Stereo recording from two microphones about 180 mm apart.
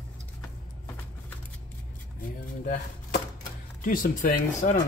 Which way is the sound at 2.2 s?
50° left (ahead or behind).